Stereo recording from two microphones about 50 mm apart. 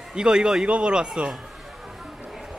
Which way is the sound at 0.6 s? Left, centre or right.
Right.